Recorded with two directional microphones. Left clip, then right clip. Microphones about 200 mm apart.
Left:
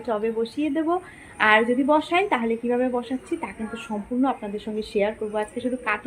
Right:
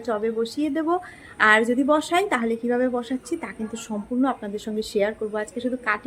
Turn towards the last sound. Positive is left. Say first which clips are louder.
# right 1 dB
turn(degrees=-15)  # may be behind; listen again after turning